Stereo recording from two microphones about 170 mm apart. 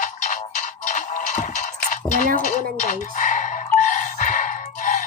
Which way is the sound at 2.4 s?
50° left (ahead or behind).